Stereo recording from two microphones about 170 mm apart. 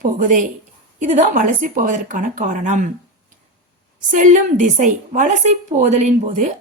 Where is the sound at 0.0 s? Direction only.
50° right (ahead or behind).